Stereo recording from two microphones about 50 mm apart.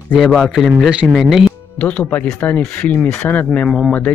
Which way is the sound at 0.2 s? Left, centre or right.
Centre.